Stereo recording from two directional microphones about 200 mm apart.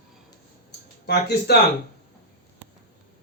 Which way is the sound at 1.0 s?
55° left (ahead or behind).